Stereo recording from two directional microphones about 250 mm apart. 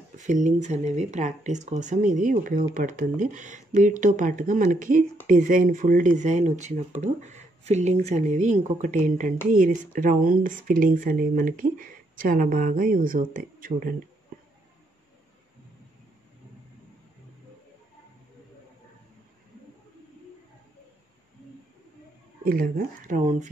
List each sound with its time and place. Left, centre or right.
0.2 s speech: right
22.4 s speech: right